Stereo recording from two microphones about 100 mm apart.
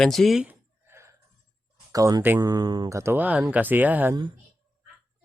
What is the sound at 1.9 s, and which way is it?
Speech, 35° right (ahead or behind).